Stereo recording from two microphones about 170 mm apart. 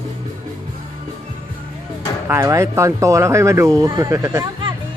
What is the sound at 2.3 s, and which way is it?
Speech, 15° right (ahead or behind).